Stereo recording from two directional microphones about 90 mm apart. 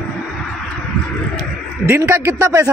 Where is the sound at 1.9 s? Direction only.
30° right (ahead or behind).